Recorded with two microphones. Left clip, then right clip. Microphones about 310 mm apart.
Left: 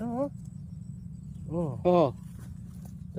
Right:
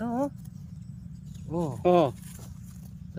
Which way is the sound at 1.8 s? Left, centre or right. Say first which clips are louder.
Right 1 dB; centre.